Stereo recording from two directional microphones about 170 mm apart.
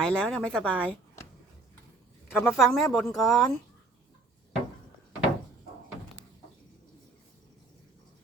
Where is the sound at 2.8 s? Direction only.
15° left (ahead or behind).